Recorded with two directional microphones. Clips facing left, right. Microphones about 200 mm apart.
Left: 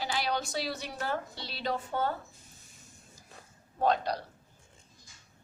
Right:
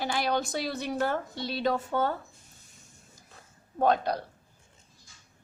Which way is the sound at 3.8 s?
50° right (ahead or behind).